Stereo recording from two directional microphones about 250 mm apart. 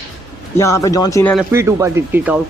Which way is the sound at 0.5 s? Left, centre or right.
Centre.